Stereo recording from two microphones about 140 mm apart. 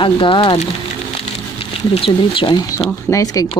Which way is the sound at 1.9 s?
40° left (ahead or behind).